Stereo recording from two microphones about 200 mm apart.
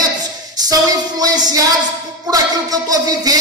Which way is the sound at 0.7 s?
20° right (ahead or behind).